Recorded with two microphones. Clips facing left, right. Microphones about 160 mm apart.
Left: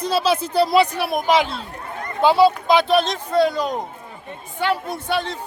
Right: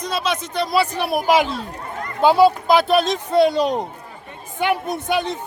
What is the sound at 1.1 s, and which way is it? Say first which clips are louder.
Speech: right 1 dB; 10° right (ahead or behind).